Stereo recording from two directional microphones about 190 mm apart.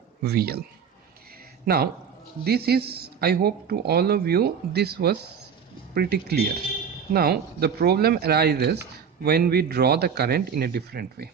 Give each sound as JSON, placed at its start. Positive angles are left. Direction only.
{"t": 0.3, "sound": "a man's voice", "side_deg": -55}
{"t": 1.6, "sound": "a man's voice", "side_deg": -55}